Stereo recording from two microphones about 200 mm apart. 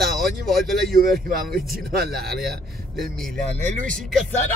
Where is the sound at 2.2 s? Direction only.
Centre (ahead or behind).